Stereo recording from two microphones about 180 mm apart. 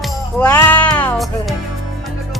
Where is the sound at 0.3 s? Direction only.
10° left (ahead or behind).